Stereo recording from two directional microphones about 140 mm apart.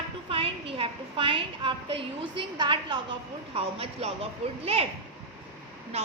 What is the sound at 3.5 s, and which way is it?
A child's voice, 45° right (ahead or behind).